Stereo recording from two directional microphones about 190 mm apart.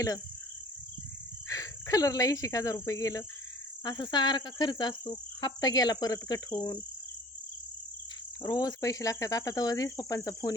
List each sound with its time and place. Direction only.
1.5 s speech: 20° left (ahead or behind)
3.8 s cricket: 20° left (ahead or behind)
8.4 s cricket: 20° left (ahead or behind)